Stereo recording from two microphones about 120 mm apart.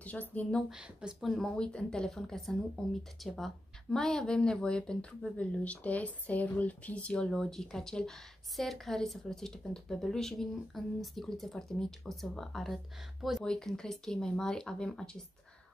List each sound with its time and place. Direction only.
0.0 s speech: 15° left (ahead or behind)
0.7 s speech: 5° right (ahead or behind)